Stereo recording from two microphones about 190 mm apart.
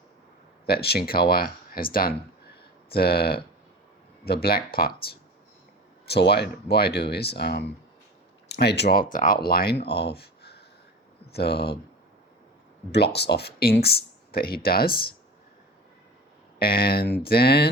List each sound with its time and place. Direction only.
0.7 s speech: 55° left (ahead or behind)
12.9 s speech: 60° left (ahead or behind)
16.6 s speech: 50° left (ahead or behind)